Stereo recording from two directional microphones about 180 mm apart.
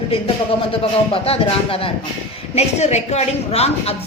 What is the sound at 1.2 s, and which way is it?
Speech, 30° left (ahead or behind).